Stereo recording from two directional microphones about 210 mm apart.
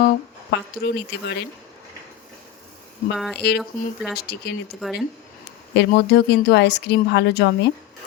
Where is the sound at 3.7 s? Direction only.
40° left (ahead or behind).